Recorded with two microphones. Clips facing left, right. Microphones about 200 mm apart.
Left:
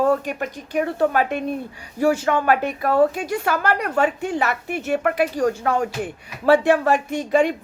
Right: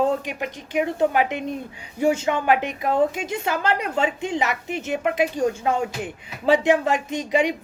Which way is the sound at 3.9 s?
50° left (ahead or behind).